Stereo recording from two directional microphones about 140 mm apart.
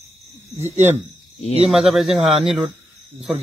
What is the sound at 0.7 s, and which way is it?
Speech, 55° right (ahead or behind).